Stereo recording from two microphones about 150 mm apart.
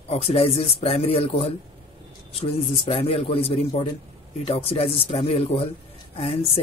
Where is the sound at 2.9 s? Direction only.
40° left (ahead or behind).